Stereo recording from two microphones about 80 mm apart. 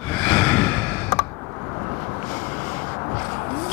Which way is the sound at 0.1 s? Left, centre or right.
Centre.